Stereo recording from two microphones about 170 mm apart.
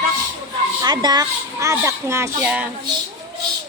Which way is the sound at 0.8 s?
25° right (ahead or behind).